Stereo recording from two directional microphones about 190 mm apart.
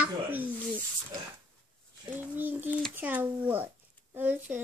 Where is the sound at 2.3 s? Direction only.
10° right (ahead or behind).